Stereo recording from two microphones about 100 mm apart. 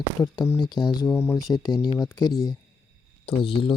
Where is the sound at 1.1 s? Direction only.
25° left (ahead or behind).